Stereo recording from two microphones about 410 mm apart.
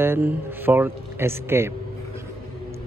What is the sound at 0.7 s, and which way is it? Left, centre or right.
Speech, centre.